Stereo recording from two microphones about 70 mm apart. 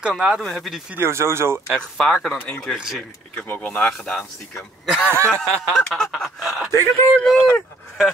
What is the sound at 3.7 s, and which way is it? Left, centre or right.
Speech, centre.